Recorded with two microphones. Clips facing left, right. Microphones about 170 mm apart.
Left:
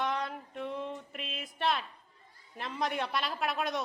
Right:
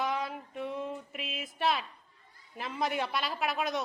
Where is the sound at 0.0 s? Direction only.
5° right (ahead or behind).